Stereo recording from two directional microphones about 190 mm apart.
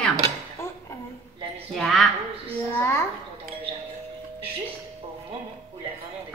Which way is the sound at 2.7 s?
15° left (ahead or behind).